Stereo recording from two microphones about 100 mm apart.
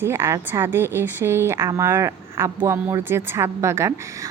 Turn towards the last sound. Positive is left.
turn(degrees=-30)  # may be behind; listen again after turning